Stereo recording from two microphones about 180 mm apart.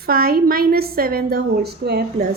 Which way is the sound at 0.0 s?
55° right (ahead or behind).